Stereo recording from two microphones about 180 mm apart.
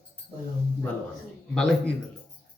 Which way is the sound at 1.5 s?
5° left (ahead or behind).